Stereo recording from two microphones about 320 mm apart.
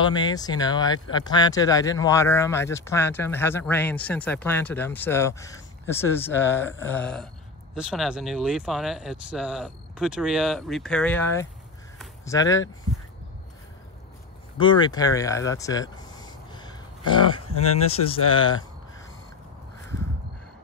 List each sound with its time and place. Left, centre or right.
0.0 s speech: centre
12.0 s a sound: centre
14.6 s speech: centre